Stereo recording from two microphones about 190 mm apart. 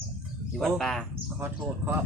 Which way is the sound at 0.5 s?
Centre (ahead or behind).